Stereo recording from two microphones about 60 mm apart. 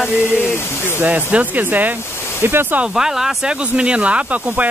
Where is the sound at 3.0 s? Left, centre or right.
Centre.